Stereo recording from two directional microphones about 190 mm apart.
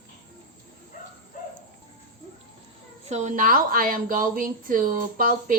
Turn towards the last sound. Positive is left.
turn(degrees=-45)  # may be behind; listen again after turning